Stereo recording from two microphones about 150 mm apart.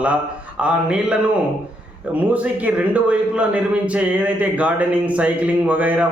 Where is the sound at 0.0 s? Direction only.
10° right (ahead or behind).